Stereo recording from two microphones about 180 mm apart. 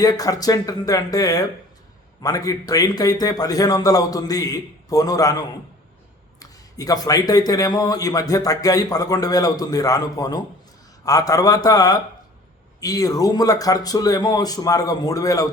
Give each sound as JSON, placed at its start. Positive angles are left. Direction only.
{"t": 0.0, "sound": "a man's voice", "side_deg": 20}
{"t": 6.4, "sound": "a man's voice", "side_deg": 20}